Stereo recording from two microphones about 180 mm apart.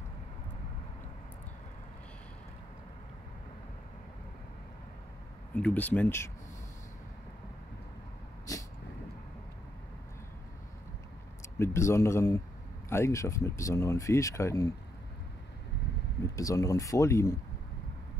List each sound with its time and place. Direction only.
5.5 s speech: 5° left (ahead or behind)
11.5 s speech: 15° left (ahead or behind)
16.3 s speech: 20° left (ahead or behind)